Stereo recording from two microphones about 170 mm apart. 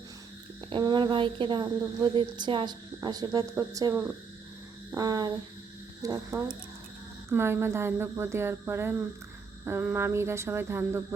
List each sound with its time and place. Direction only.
0.7 s a woman's voice: 25° right (ahead or behind)
4.9 s a sound: 20° right (ahead or behind)
6.0 s a woman's voice: 20° right (ahead or behind)